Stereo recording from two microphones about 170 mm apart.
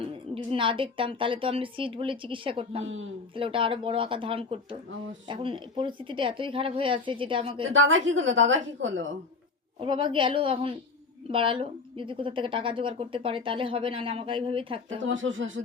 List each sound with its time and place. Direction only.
0.0 s a woman's voice: 30° right (ahead or behind)
7.9 s a woman's voice: 90° right
9.8 s a woman's voice: 30° right (ahead or behind)
15.0 s a woman's voice: 90° right